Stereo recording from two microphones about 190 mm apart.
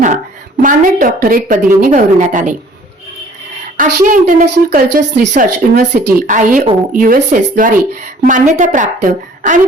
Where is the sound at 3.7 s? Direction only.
45° right (ahead or behind).